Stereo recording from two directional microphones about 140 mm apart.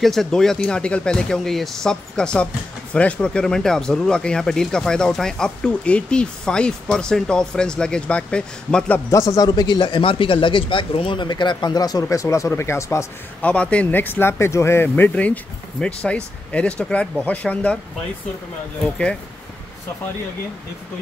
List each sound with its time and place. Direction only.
0.0 s speech: centre (ahead or behind)
9.2 s speech: 25° left (ahead or behind)
13.5 s speech: 10° left (ahead or behind)